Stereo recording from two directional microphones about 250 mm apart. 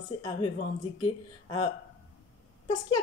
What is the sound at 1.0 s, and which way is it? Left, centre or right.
Speech, centre.